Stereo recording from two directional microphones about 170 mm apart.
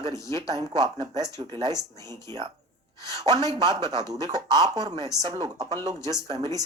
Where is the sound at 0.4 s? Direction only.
25° right (ahead or behind).